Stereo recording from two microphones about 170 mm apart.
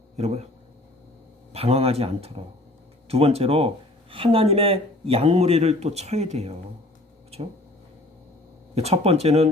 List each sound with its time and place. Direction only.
0.2 s speech: 40° right (ahead or behind)
1.5 s speech: 35° right (ahead or behind)
8.7 s speech: 35° right (ahead or behind)